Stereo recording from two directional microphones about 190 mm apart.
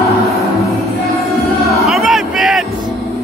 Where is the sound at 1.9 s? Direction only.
Centre (ahead or behind).